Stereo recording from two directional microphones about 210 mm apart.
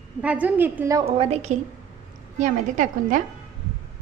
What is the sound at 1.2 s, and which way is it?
A woman's voice, 30° right (ahead or behind).